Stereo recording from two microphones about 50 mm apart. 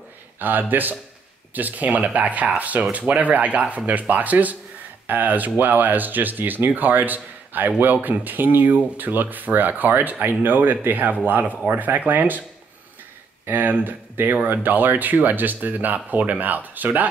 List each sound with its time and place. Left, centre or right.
0.4 s speech: right
13.5 s speech: right